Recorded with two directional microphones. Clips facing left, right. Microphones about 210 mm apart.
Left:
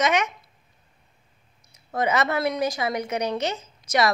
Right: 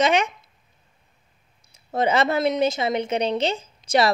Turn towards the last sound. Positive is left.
turn(degrees=-30)  # may be behind; listen again after turning